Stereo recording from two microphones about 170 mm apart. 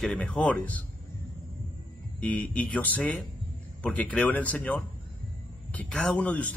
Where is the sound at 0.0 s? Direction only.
5° left (ahead or behind).